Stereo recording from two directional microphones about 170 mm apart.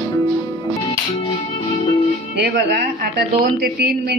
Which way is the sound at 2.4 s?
75° right (ahead or behind).